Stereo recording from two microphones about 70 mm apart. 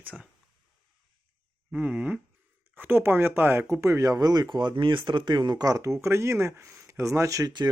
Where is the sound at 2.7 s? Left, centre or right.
Right.